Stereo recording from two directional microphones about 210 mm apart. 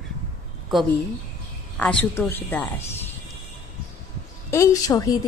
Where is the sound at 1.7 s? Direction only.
5° left (ahead or behind).